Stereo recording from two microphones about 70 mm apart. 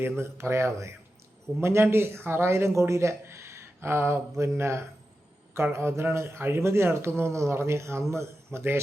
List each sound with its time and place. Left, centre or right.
0.0 s speech: right